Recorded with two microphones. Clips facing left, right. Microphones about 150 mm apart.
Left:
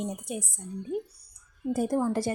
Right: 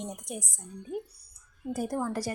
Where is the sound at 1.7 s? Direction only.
20° left (ahead or behind).